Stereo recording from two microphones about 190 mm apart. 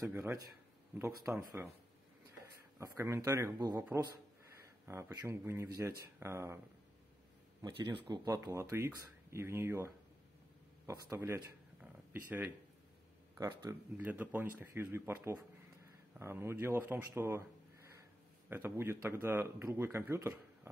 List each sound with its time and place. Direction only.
0.0 s speech: 15° right (ahead or behind)
2.8 s speech: 15° right (ahead or behind)
7.6 s speech: 25° right (ahead or behind)
8.3 s speech: 15° right (ahead or behind)
13.5 s speech: 20° right (ahead or behind)
13.9 s speech: 10° right (ahead or behind)